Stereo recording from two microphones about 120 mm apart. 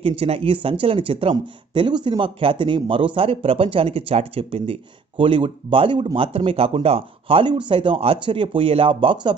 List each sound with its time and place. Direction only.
0.0 s speech: 50° right (ahead or behind)